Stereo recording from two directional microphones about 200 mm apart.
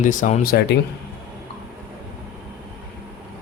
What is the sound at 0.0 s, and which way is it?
Speech, 40° left (ahead or behind).